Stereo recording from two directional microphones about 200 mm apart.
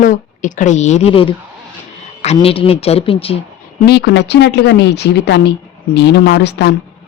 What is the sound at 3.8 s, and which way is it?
A woman's voice, 55° left (ahead or behind).